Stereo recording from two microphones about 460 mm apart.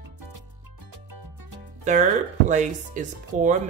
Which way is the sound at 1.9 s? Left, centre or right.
Centre.